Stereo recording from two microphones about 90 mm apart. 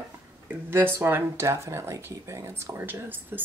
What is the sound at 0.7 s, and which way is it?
Speech, 25° right (ahead or behind).